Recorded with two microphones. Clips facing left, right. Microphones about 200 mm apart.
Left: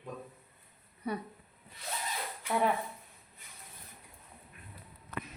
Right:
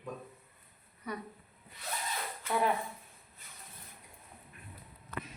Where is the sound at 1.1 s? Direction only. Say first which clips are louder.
Left 4 dB; 30° left (ahead or behind).